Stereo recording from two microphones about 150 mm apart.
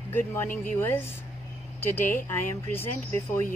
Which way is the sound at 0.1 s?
15° left (ahead or behind).